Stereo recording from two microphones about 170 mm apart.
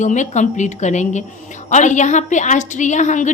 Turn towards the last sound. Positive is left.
turn(degrees=45)  # may be behind; listen again after turning